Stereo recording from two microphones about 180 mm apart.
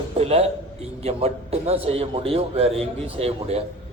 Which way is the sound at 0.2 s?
35° right (ahead or behind).